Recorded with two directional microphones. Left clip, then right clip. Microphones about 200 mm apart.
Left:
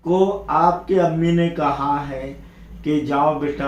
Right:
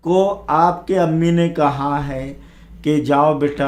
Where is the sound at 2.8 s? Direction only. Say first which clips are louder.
Right 4 dB; 55° right (ahead or behind).